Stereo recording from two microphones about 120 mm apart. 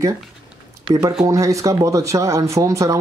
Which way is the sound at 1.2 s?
25° right (ahead or behind).